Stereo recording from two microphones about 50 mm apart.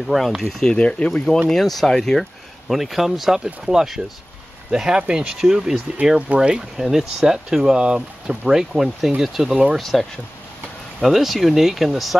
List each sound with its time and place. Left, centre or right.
0.0 s speech: centre
0.6 s speech: centre
1.5 s speech: centre
2.7 s speech: centre
6.1 s speech: right; by 12.2 s centre